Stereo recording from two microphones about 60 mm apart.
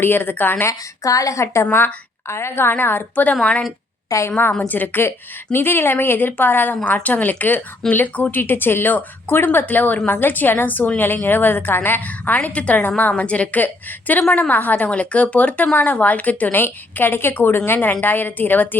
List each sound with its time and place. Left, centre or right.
0.0 s a woman's voice: left
0.7 s a woman's voice: left
1.7 s a woman's voice: left
16.6 s a woman's voice: left